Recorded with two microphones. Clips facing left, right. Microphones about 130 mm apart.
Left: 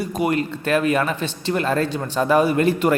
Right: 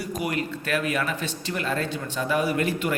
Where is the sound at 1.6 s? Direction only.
40° left (ahead or behind).